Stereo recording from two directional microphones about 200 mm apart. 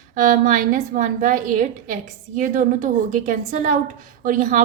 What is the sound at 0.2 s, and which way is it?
A woman's voice, 40° right (ahead or behind).